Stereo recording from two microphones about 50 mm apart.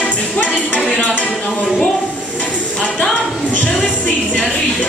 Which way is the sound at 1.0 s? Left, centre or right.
Left.